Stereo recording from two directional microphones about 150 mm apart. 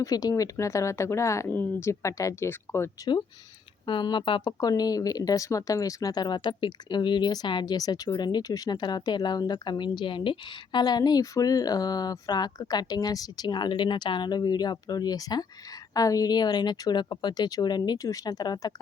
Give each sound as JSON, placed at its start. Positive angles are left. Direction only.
{"t": 0.0, "sound": "speech", "side_deg": 25}
{"t": 3.8, "sound": "speech", "side_deg": 30}